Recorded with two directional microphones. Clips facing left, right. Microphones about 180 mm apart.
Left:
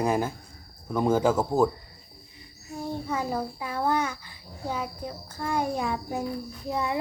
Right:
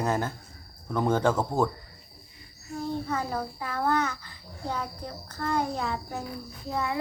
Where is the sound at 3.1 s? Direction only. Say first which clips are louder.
Left 2 dB; 10° left (ahead or behind).